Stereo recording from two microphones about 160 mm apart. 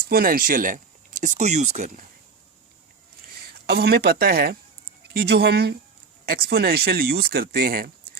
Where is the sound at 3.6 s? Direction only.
75° right (ahead or behind).